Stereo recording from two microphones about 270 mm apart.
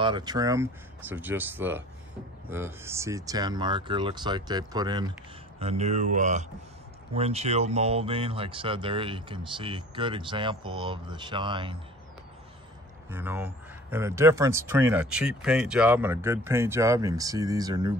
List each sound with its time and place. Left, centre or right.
0.0 s speech: centre
13.1 s speech: centre